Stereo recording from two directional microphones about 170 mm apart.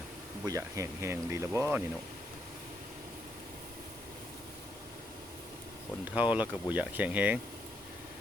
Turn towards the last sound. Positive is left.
turn(degrees=-10)  # may be behind; listen again after turning